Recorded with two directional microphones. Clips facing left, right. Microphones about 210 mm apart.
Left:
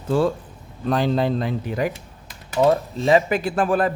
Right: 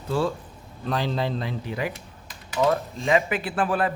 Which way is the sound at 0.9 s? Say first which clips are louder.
Left 6 dB; 50° left (ahead or behind).